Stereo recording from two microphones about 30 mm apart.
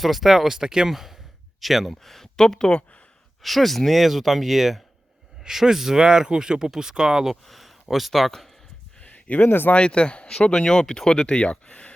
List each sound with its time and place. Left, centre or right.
0.0 s speech: centre
1.9 s speech: centre
2.3 s speech: centre
3.4 s speech: centre
5.4 s speech: centre
6.0 s speech: right
7.4 s a sound: centre
9.0 s a sound: left
9.7 s speech: left
10.2 s speech: left